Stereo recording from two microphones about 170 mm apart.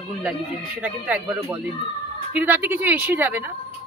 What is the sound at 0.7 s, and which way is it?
Speech, 10° right (ahead or behind).